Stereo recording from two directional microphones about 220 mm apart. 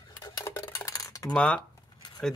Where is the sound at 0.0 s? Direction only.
20° left (ahead or behind).